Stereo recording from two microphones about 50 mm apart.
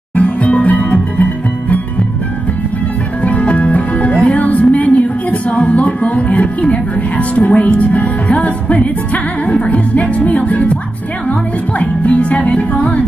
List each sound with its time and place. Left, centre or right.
0.1 s music: left
3.3 s speech: left
11.8 s speech: left